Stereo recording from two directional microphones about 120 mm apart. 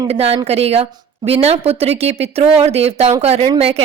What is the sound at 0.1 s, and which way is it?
A woman's voice, 60° right (ahead or behind).